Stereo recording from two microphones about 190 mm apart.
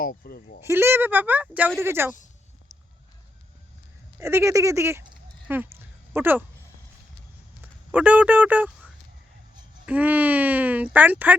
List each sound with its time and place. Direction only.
0.0 s speech: 50° left (ahead or behind)
0.6 s speech: 15° right (ahead or behind)
4.2 s speech: 15° right (ahead or behind)
5.5 s a sound: 10° right (ahead or behind)
7.6 s speech: 10° right (ahead or behind)